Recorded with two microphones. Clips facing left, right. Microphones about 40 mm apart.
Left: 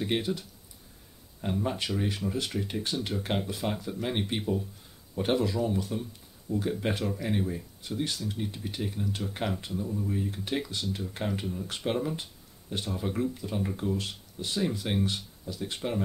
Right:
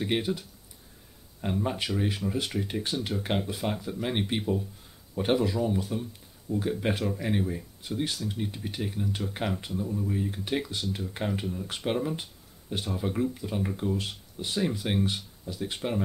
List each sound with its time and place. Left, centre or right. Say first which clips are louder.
0.0 s speech: right 1 dB; centre